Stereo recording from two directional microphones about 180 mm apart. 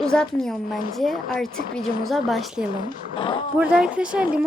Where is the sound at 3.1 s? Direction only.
30° left (ahead or behind).